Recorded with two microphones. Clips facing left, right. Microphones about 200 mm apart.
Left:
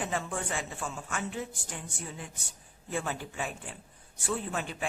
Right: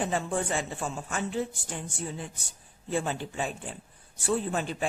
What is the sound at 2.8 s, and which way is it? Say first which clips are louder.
A woman's voice: right 4 dB; 25° right (ahead or behind).